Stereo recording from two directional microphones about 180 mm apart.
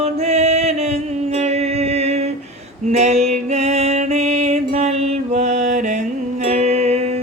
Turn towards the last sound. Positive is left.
turn(degrees=-35)  # may be behind; listen again after turning